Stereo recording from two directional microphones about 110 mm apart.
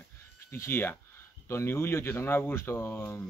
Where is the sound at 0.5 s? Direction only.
20° left (ahead or behind).